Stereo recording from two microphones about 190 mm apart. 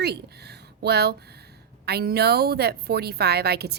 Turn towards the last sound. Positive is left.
turn(degrees=-55)  # may be behind; listen again after turning